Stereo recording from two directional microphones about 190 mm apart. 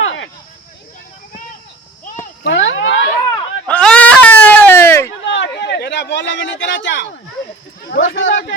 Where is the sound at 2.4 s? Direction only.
75° left (ahead or behind).